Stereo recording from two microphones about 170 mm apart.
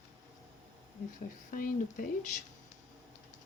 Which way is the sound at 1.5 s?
50° left (ahead or behind).